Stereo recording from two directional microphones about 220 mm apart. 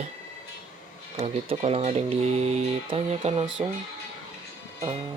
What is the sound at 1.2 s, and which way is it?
Speech, 30° right (ahead or behind).